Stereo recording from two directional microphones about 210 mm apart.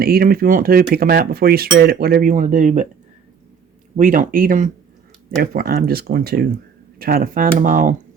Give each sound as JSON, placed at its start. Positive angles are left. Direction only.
{"t": 0.0, "sound": "speech", "side_deg": -45}
{"t": 1.7, "sound": "cutlery", "side_deg": -45}
{"t": 3.9, "sound": "cutlery", "side_deg": -40}
{"t": 5.4, "sound": "speech", "side_deg": -45}
{"t": 7.0, "sound": "cutlery", "side_deg": -45}